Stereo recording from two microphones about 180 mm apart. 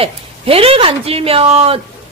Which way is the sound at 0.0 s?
30° right (ahead or behind).